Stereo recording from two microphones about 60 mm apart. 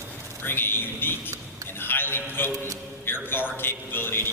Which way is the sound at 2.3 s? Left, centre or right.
Left.